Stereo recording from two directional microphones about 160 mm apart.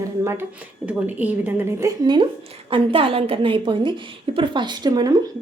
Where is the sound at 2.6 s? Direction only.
35° right (ahead or behind).